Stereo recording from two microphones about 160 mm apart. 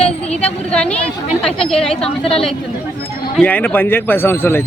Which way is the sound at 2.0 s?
35° left (ahead or behind).